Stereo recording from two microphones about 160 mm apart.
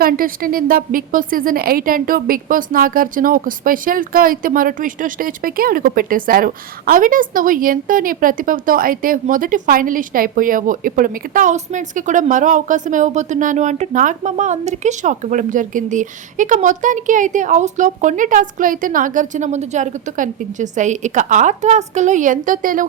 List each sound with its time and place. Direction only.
0.0 s a woman's voice: 65° right (ahead or behind)